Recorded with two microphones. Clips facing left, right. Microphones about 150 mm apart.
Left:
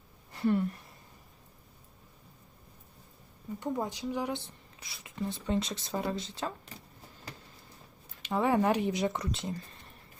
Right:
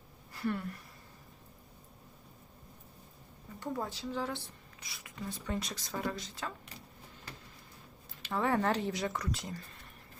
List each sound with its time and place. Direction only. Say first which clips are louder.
0.3 s speech: left 7 dB; 25° left (ahead or behind)
3.6 s speech: left 4 dB; 20° left (ahead or behind)
8.2 s speech: left 4 dB; 15° left (ahead or behind)